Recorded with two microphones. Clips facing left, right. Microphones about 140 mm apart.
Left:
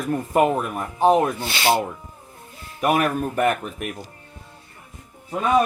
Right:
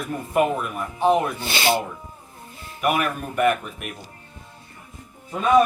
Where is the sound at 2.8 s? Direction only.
40° left (ahead or behind).